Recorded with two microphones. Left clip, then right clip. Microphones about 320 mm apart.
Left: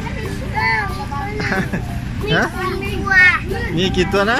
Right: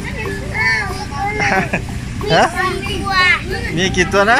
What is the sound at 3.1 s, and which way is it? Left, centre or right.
Children playing, centre.